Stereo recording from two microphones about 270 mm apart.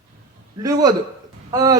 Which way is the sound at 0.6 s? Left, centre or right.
Centre.